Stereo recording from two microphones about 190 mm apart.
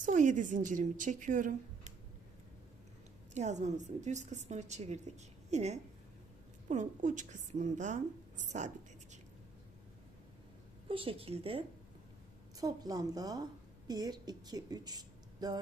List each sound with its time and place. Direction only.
0.0 s a woman's voice: 40° right (ahead or behind)
3.3 s a woman's voice: 35° right (ahead or behind)
10.8 s a woman's voice: 30° right (ahead or behind)
12.5 s a woman's voice: 20° right (ahead or behind)